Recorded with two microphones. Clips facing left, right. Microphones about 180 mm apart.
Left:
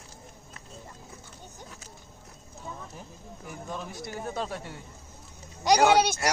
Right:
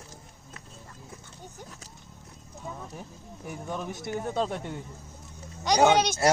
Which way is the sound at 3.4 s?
15° right (ahead or behind).